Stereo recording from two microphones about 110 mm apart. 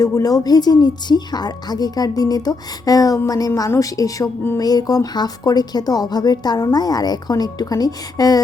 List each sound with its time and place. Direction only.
0.0 s speech: 35° left (ahead or behind)